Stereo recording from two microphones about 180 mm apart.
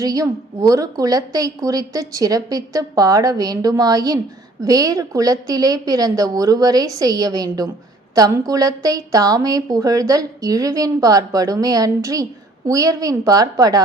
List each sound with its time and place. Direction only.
0.0 s a woman's voice: 20° right (ahead or behind)